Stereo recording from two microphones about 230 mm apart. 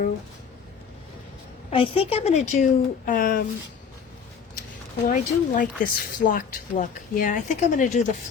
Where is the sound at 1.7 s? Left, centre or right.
Left.